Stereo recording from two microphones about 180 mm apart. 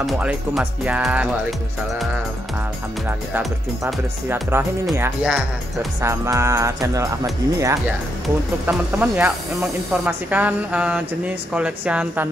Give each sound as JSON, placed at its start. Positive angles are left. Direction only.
{"t": 0.0, "sound": "speech", "side_deg": 0}
{"t": 3.1, "sound": "speech", "side_deg": -10}
{"t": 5.2, "sound": "speech", "side_deg": 0}
{"t": 5.9, "sound": "speech", "side_deg": -15}